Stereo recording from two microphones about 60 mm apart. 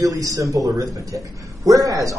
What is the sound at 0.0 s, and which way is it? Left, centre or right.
A man's voice, right.